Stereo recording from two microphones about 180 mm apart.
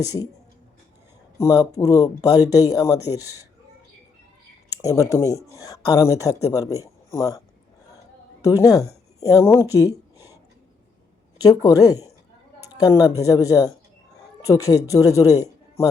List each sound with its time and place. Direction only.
0.0 s speech: 20° left (ahead or behind)
1.4 s speech: 20° left (ahead or behind)
4.7 s speech: 20° left (ahead or behind)
8.4 s speech: 20° left (ahead or behind)
9.8 s a sound: 20° left (ahead or behind)
11.6 s speech: 20° left (ahead or behind)